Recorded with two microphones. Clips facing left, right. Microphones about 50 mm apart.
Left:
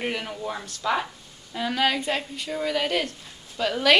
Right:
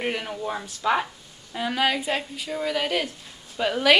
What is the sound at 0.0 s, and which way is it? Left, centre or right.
Speech, centre.